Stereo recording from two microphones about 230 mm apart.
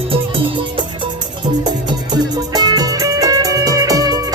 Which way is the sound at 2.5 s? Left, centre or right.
Centre.